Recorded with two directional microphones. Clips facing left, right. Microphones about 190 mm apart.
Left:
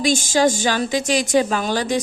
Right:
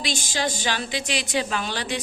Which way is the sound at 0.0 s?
45° left (ahead or behind).